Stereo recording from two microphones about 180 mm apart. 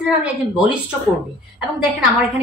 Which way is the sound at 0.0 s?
5° right (ahead or behind).